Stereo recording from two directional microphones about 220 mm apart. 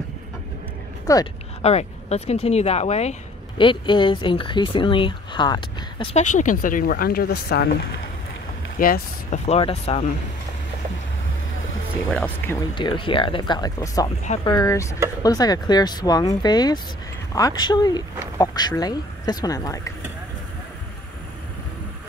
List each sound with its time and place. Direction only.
1.0 s speech: 15° left (ahead or behind)
1.6 s speech: 30° left (ahead or behind); by 7.7 s 45° left (ahead or behind)
8.7 s speech: 40° left (ahead or behind)
11.5 s music: 65° left (ahead or behind)
12.1 s speech: 10° left (ahead or behind)
12.7 s speech: 20° left (ahead or behind)